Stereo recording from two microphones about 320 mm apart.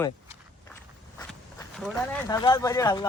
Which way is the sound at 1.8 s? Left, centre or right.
Centre.